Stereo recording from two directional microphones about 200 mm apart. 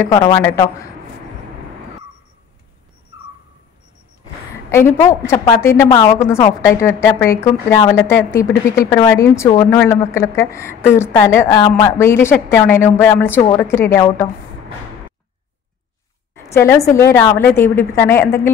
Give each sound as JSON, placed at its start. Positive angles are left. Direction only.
{"t": 0.0, "sound": "a woman's voice", "side_deg": 20}
{"t": 4.6, "sound": "a woman's voice", "side_deg": 15}
{"t": 16.4, "sound": "a woman's voice", "side_deg": 15}